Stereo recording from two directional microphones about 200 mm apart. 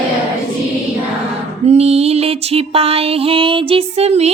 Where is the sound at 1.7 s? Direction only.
30° right (ahead or behind).